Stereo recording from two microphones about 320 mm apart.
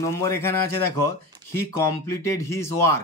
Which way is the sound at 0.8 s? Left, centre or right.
Left.